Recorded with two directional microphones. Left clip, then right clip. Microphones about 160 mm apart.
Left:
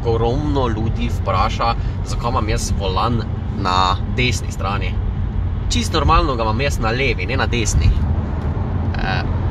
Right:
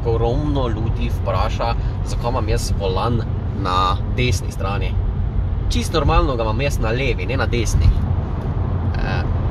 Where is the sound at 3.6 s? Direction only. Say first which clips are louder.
Left 2 dB; 20° left (ahead or behind).